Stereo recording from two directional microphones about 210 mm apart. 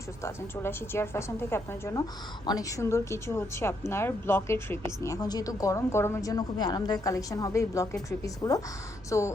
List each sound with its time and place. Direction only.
0.2 s a woman's voice: 10° left (ahead or behind)